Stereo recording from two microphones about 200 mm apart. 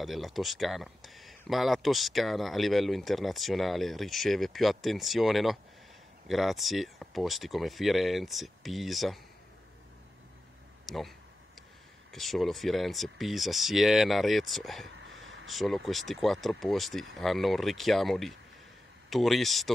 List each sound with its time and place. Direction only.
0.0 s speech: centre (ahead or behind)
10.9 s speech: centre (ahead or behind)
15.0 s a sound: 65° right (ahead or behind)
15.4 s speech: centre (ahead or behind)